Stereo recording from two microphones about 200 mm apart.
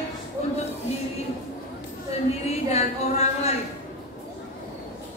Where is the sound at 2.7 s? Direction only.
35° left (ahead or behind).